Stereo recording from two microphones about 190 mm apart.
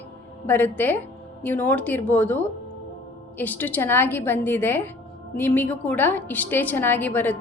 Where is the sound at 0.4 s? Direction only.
10° left (ahead or behind).